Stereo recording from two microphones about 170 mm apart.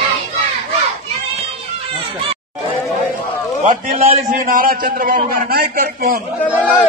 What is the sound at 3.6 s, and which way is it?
A man's voice, 50° right (ahead or behind).